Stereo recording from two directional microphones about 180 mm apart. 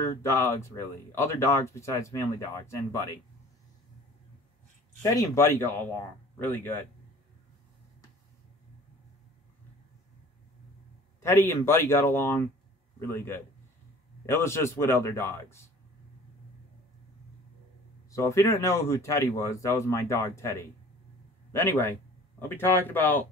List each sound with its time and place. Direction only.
0.0 s speech: 15° left (ahead or behind)
5.0 s speech: 20° left (ahead or behind)
11.1 s speech: 15° left (ahead or behind)
18.1 s speech: 15° left (ahead or behind)